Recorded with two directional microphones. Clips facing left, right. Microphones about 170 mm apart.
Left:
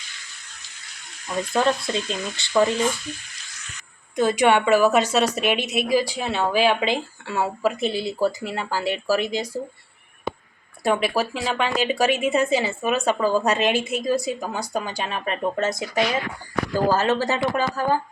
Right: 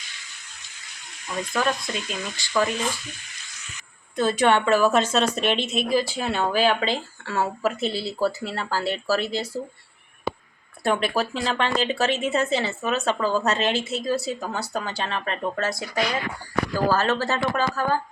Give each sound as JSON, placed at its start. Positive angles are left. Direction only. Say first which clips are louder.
{"t": 1.5, "sound": "speech", "louder": "left 4 dB", "side_deg": 25}
{"t": 4.1, "sound": "speech", "louder": "left 2 dB", "side_deg": 15}
{"t": 10.8, "sound": "speech", "louder": "left 2 dB", "side_deg": 5}